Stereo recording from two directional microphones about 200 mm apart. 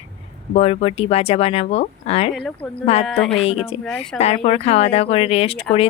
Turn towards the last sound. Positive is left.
turn(degrees=30)  # may be behind; listen again after turning